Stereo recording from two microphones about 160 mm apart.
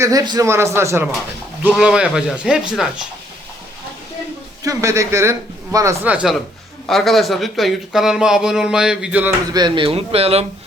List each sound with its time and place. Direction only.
0.0 s speech: 20° right (ahead or behind)
1.6 s speech: 5° right (ahead or behind)
4.6 s speech: 20° right (ahead or behind)
6.8 s speech: centre (ahead or behind)
9.5 s speech: 25° right (ahead or behind)